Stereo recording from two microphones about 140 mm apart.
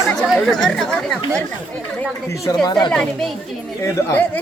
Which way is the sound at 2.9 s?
5° left (ahead or behind).